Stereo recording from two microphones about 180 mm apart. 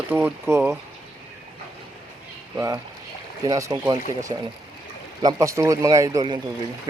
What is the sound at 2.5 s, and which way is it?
Speech, 20° right (ahead or behind).